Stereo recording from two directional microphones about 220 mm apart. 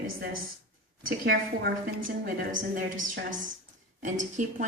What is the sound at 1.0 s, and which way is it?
Speech, 40° right (ahead or behind).